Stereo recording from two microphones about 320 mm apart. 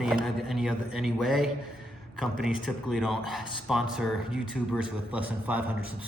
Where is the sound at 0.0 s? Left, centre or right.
Centre.